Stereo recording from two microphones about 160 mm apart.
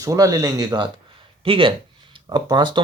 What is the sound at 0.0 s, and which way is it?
Speech, 20° right (ahead or behind).